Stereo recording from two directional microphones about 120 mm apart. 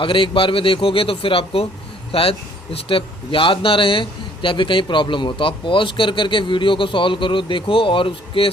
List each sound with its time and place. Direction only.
0.0 s a man's voice: 45° left (ahead or behind)